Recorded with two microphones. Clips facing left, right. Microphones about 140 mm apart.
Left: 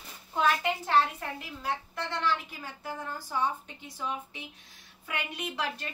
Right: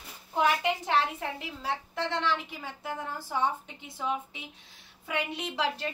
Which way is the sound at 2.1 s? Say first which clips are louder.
Left 2 dB; 20° right (ahead or behind).